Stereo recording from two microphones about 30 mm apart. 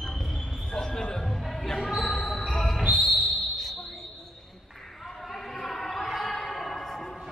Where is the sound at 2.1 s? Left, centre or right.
Centre.